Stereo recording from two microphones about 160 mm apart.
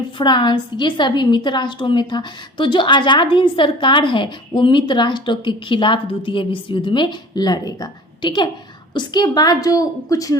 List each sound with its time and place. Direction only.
0.2 s a woman's voice: 30° left (ahead or behind)